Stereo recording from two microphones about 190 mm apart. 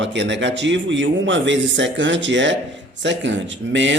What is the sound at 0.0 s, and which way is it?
A man's voice, 70° right (ahead or behind).